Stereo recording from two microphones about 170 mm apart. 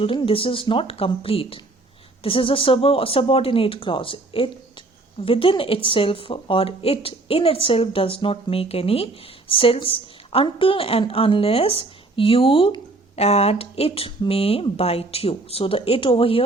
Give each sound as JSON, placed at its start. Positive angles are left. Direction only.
{"t": 0.0, "sound": "a woman's voice", "side_deg": 30}